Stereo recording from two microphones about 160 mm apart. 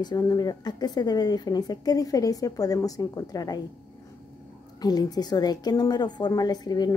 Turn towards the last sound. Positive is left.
turn(degrees=25)  # may be behind; listen again after turning